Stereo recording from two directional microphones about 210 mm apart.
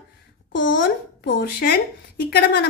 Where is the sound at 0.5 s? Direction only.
60° left (ahead or behind).